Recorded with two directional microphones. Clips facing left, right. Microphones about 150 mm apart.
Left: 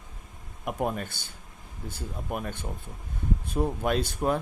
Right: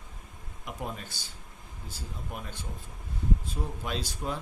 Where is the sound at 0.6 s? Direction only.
55° left (ahead or behind).